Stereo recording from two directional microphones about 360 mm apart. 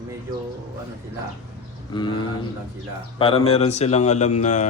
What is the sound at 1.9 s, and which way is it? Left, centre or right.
Speech, centre.